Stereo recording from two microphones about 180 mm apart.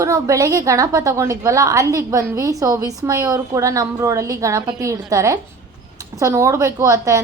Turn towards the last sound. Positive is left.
turn(degrees=-15)  # may be behind; listen again after turning